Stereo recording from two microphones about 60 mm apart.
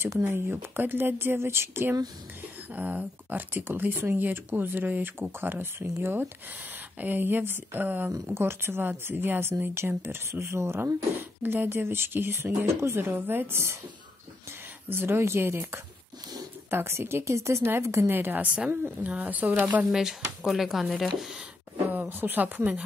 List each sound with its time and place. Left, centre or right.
0.3 s speech: right
2.7 s speech: right
10.4 s speech: right
11.1 s speech: right
14.9 s speech: right
18.1 s speech: right
19.9 s speech: centre
21.9 s speech: right